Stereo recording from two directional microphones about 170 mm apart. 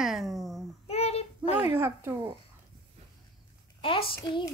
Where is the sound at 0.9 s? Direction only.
35° left (ahead or behind).